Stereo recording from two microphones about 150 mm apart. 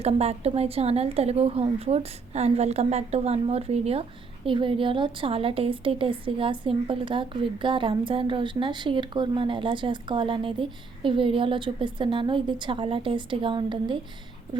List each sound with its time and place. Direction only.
0.0 s a woman's voice: 45° right (ahead or behind)